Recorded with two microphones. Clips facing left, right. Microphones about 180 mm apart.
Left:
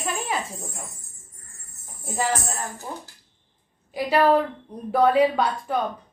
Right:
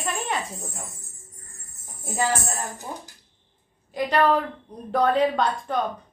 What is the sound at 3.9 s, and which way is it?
A woman's voice, 5° left (ahead or behind).